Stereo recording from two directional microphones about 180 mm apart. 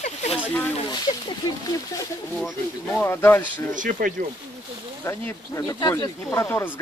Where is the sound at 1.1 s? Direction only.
40° left (ahead or behind).